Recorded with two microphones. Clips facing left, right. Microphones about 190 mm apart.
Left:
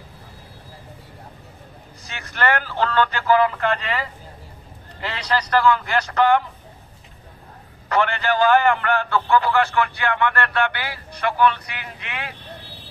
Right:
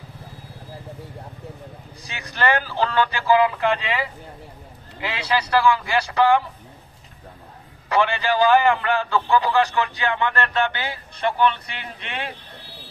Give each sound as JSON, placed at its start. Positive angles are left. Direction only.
{"t": 2.0, "sound": "a man's voice", "side_deg": -15}
{"t": 7.9, "sound": "a man's voice", "side_deg": -15}